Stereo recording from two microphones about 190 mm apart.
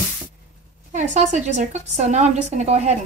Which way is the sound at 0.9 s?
40° right (ahead or behind).